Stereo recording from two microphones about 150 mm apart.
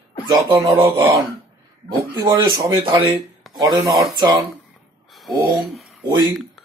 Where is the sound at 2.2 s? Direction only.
30° right (ahead or behind).